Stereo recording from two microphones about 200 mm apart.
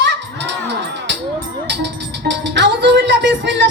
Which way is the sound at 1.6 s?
60° right (ahead or behind).